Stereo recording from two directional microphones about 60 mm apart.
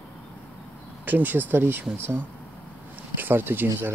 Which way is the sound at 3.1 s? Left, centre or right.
Right.